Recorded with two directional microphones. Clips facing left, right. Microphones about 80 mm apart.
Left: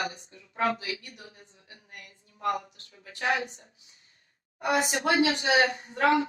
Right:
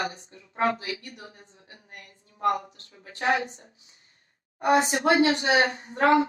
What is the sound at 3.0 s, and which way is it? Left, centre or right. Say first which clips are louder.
A woman's voice: right 3 dB; right.